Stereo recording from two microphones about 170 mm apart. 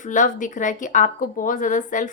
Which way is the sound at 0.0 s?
50° left (ahead or behind).